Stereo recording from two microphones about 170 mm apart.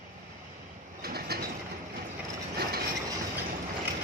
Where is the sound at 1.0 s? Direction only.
65° right (ahead or behind).